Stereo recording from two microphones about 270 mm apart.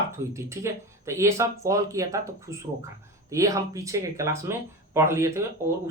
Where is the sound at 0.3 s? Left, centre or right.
Centre.